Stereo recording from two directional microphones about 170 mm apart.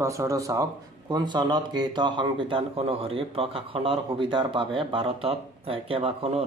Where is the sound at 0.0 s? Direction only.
20° right (ahead or behind).